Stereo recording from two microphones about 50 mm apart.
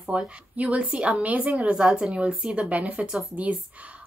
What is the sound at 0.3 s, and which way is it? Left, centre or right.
A woman's voice, right.